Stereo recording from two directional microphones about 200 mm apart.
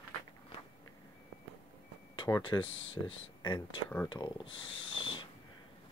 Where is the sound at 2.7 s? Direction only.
75° left (ahead or behind).